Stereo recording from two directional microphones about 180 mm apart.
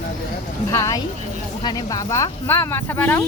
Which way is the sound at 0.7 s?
15° left (ahead or behind).